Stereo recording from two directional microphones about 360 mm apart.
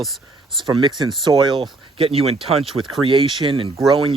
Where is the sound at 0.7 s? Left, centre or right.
Centre.